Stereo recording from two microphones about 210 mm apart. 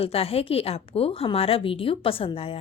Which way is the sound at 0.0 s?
25° left (ahead or behind).